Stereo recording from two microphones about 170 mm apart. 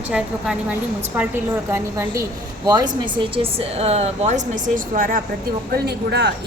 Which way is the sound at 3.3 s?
35° right (ahead or behind).